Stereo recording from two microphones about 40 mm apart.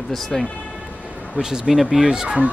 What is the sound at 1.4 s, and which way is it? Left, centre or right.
Speech, centre.